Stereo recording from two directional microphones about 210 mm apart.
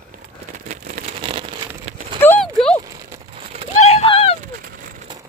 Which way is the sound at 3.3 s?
25° right (ahead or behind).